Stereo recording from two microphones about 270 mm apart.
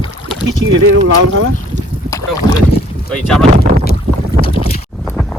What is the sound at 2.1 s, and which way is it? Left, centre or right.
Boat, centre.